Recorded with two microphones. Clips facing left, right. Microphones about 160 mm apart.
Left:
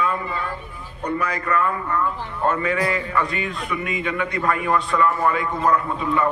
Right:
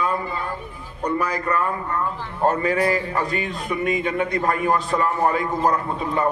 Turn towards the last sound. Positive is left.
turn(degrees=-40)  # may be behind; listen again after turning